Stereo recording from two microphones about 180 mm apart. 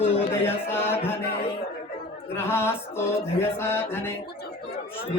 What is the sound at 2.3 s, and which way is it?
Mantra, 15° left (ahead or behind).